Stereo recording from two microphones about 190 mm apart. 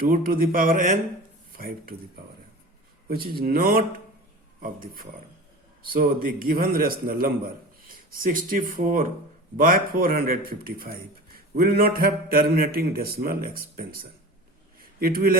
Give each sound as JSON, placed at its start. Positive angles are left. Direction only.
{"t": 0.0, "sound": "a man's voice", "side_deg": -50}
{"t": 3.1, "sound": "a man's voice", "side_deg": -50}
{"t": 14.8, "sound": "a sound", "side_deg": -50}